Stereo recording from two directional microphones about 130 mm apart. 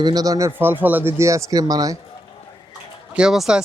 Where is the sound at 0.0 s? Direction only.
30° right (ahead or behind).